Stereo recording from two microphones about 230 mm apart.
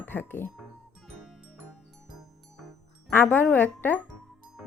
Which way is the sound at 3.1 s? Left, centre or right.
Centre.